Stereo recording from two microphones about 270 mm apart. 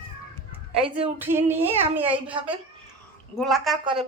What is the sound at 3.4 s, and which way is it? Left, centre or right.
Speech, centre.